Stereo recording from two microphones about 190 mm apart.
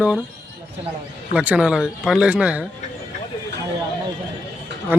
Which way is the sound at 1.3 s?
5° right (ahead or behind).